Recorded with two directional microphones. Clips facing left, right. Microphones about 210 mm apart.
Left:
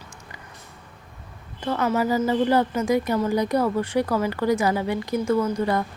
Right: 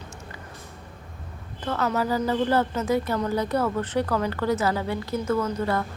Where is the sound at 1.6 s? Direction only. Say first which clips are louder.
Left 3 dB; 10° left (ahead or behind).